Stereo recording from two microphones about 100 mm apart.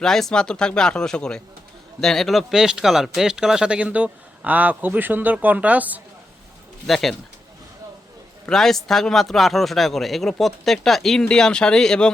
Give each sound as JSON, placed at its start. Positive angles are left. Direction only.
{"t": 0.0, "sound": "speech", "side_deg": 5}
{"t": 6.8, "sound": "speech", "side_deg": 0}
{"t": 8.4, "sound": "speech", "side_deg": 5}